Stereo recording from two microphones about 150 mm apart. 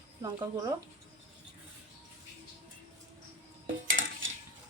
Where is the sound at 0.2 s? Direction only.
25° right (ahead or behind).